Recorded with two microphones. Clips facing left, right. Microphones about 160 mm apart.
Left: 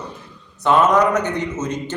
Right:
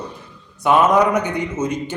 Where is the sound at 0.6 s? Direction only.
10° right (ahead or behind).